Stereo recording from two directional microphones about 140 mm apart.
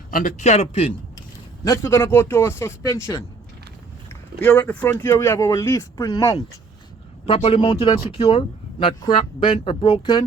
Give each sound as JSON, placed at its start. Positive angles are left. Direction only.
{"t": 0.1, "sound": "speech", "side_deg": 65}
{"t": 1.6, "sound": "speech", "side_deg": 20}
{"t": 4.4, "sound": "speech", "side_deg": 10}
{"t": 7.3, "sound": "speech", "side_deg": 45}